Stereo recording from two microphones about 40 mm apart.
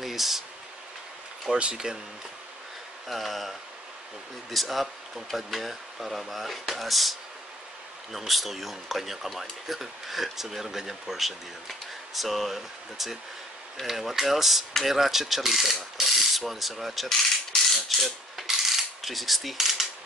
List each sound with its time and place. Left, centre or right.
0.0 s a sound: centre
1.5 s speech: right
3.1 s speech: centre
8.3 s speech: centre
17.7 s mechanisms: centre